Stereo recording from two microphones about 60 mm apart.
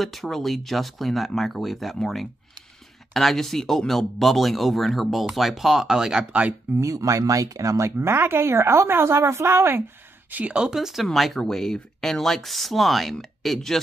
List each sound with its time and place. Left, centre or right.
0.0 s speech: centre
6.8 s speech: right
10.3 s speech: right; by 13.7 s centre